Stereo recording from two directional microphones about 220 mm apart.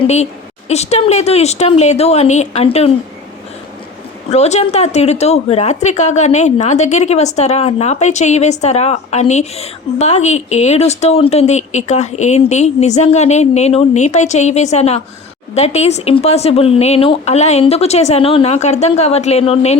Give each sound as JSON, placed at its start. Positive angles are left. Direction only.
{"t": 0.0, "sound": "speech", "side_deg": 30}
{"t": 4.3, "sound": "a woman's voice", "side_deg": 30}